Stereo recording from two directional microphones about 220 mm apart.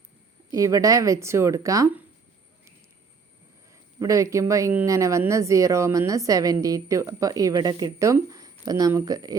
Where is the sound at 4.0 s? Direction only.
15° right (ahead or behind).